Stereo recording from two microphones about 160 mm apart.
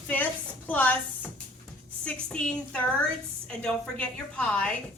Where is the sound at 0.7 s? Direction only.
10° left (ahead or behind).